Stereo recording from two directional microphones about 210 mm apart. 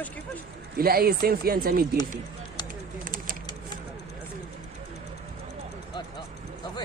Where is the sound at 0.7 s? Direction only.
45° right (ahead or behind).